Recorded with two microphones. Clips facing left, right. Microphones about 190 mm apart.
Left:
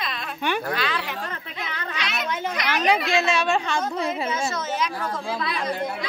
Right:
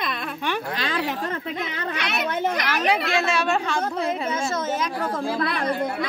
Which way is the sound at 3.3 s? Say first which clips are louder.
Even; 5° right (ahead or behind).